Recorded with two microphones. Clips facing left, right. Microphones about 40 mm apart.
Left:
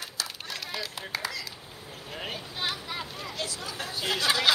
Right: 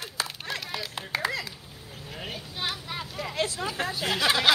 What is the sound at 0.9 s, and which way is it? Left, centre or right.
Clapping, right.